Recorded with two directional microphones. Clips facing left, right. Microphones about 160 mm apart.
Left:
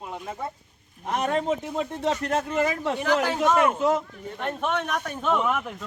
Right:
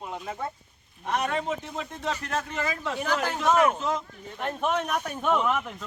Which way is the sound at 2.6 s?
25° left (ahead or behind).